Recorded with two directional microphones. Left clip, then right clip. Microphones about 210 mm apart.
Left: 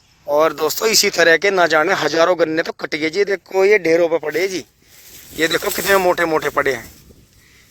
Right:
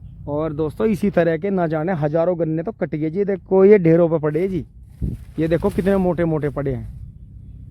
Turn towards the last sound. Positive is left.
turn(degrees=5)  # may be behind; listen again after turning